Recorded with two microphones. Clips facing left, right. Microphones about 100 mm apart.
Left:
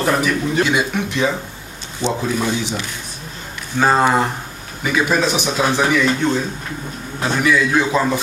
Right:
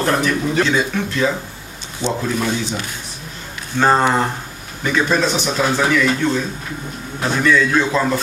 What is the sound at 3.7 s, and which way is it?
A man's voice, 5° left (ahead or behind).